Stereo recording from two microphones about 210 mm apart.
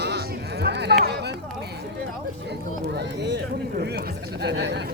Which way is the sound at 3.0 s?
55° right (ahead or behind).